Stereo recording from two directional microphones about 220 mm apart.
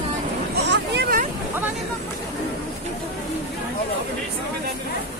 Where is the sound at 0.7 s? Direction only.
45° right (ahead or behind).